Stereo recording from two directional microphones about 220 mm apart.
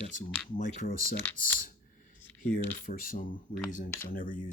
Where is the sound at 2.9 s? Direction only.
40° left (ahead or behind).